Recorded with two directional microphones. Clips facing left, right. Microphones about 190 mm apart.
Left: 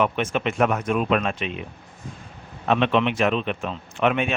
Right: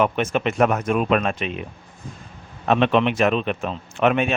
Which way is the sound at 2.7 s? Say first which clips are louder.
Right 2 dB; 45° right (ahead or behind).